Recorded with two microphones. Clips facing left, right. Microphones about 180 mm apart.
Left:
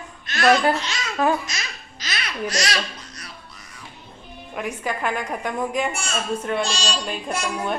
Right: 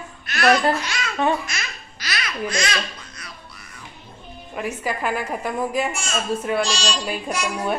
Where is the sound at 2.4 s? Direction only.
40° left (ahead or behind).